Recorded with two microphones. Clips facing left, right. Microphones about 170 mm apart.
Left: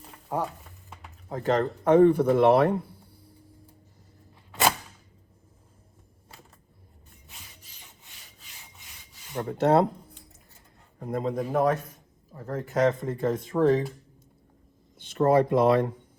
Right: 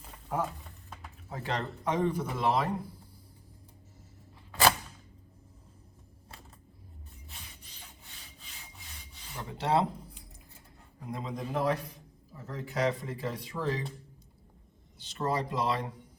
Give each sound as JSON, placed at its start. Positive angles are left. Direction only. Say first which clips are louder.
{"t": 1.3, "sound": "speech", "louder": "left 10 dB", "side_deg": 45}
{"t": 9.3, "sound": "speech", "louder": "left 7 dB", "side_deg": 55}
{"t": 11.0, "sound": "speech", "louder": "left 9 dB", "side_deg": 50}
{"t": 14.9, "sound": "speech", "louder": "left 11 dB", "side_deg": 55}